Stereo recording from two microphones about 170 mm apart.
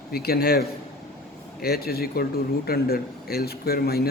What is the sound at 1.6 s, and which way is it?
Speech, 65° left (ahead or behind).